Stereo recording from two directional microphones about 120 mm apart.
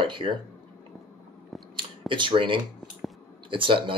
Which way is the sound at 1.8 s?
45° right (ahead or behind).